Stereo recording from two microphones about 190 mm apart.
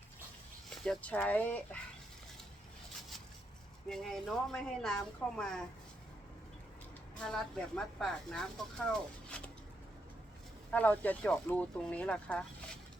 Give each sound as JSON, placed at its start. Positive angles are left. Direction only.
{"t": 0.9, "sound": "speech", "side_deg": 10}
{"t": 3.8, "sound": "speech", "side_deg": 0}
{"t": 7.3, "sound": "speech", "side_deg": 0}
{"t": 8.9, "sound": "a sound", "side_deg": 5}
{"t": 10.7, "sound": "speech", "side_deg": 10}